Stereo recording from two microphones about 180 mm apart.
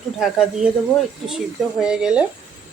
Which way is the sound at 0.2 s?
Centre (ahead or behind).